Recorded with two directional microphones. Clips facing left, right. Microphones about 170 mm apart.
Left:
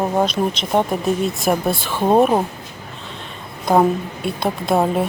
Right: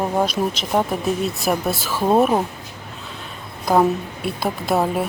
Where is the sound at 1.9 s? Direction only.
15° left (ahead or behind).